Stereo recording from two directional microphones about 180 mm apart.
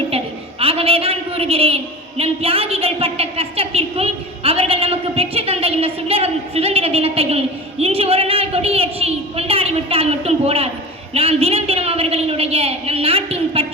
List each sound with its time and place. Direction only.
0.6 s a woman's voice: 30° right (ahead or behind)